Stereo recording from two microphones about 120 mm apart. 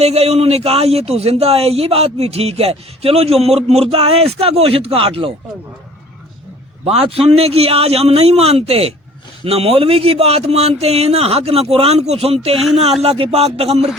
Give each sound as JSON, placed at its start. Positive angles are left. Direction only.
{"t": 0.0, "sound": "speech", "side_deg": -60}
{"t": 6.8, "sound": "speech", "side_deg": -55}